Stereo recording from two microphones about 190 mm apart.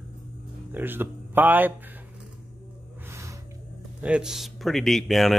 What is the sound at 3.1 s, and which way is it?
Music, 15° right (ahead or behind).